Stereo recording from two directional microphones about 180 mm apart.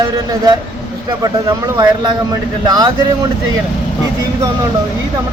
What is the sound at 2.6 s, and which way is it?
Speech, 20° right (ahead or behind).